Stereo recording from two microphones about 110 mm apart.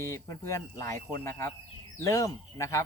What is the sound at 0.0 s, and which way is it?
Speech, 30° left (ahead or behind).